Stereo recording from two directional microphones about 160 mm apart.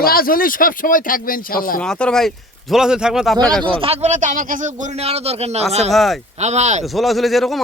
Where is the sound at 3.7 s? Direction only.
35° right (ahead or behind).